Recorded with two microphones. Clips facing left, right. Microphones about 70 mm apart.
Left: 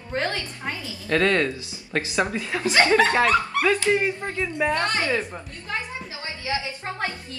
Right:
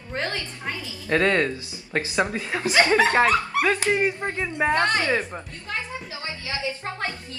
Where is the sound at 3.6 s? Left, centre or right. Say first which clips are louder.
Left 1 dB; right.